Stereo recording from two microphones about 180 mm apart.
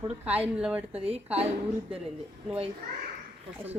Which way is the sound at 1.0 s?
35° right (ahead or behind).